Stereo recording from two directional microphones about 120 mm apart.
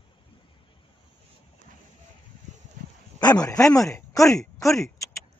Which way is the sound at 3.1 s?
35° left (ahead or behind).